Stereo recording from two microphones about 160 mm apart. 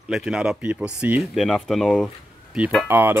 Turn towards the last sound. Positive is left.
turn(degrees=-15)  # may be behind; listen again after turning